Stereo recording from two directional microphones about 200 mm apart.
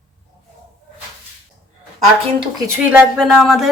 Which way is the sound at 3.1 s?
Centre (ahead or behind).